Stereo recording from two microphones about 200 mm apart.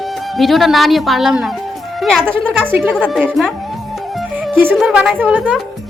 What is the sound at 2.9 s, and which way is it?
Speech, 5° left (ahead or behind).